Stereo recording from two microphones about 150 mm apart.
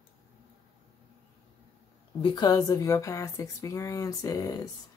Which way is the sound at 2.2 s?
30° left (ahead or behind).